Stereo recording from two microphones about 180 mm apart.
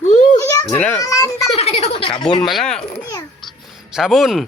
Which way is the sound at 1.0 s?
15° left (ahead or behind).